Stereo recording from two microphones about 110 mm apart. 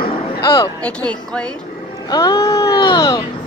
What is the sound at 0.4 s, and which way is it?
Speech, 45° left (ahead or behind).